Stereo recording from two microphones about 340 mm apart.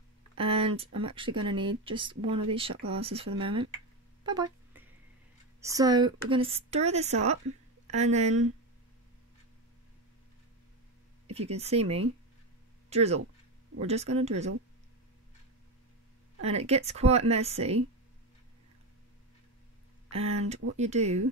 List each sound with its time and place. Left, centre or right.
0.4 s a woman's voice: centre
4.2 s a sound: centre
5.6 s a woman's voice: centre
11.2 s a woman's voice: centre
16.4 s a woman's voice: centre
20.1 s a woman's voice: centre